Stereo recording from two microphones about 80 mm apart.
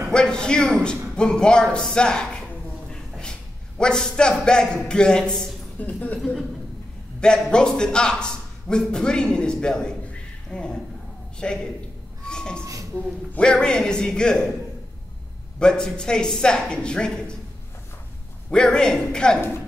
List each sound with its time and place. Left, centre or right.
0.1 s a man's voice: centre
5.8 s speech: centre
7.2 s a man's voice: centre
12.3 s a sound: centre
13.3 s speech: centre
15.6 s speech: centre
18.5 s speech: centre